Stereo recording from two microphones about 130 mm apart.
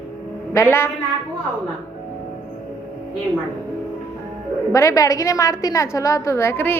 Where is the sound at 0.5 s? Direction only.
20° left (ahead or behind).